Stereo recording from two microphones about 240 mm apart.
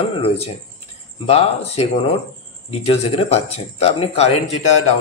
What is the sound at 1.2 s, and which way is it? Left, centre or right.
A man's voice, left.